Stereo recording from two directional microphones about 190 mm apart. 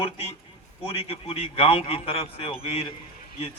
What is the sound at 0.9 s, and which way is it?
Speech, 30° left (ahead or behind).